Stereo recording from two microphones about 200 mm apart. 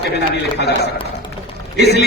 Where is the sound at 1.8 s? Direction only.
55° left (ahead or behind).